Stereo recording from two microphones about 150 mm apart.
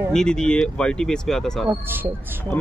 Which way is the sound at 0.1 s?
5° left (ahead or behind).